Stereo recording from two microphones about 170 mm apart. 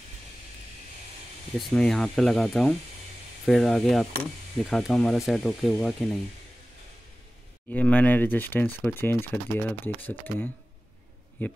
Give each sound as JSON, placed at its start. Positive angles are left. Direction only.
{"t": 1.6, "sound": "speech", "side_deg": 5}
{"t": 7.7, "sound": "speech", "side_deg": 10}